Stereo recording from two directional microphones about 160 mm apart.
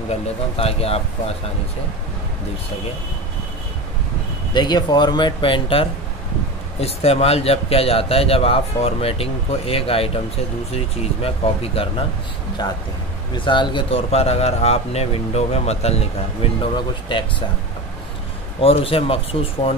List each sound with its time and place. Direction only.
0.1 s speech: 40° left (ahead or behind)
4.6 s speech: 25° left (ahead or behind)
12.6 s speech: 25° left (ahead or behind)
17.1 s speech: 30° left (ahead or behind)
18.6 s speech: 35° left (ahead or behind)